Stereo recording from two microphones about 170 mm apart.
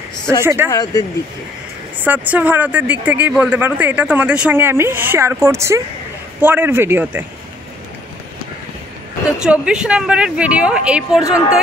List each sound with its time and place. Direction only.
0.4 s speech: 15° right (ahead or behind)
0.7 s speech: 20° left (ahead or behind)
2.0 s speech: 10° right (ahead or behind)
9.4 s speech: 5° right (ahead or behind)